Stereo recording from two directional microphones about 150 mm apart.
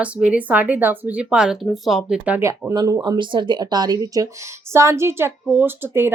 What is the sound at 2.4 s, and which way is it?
Speech, 20° right (ahead or behind).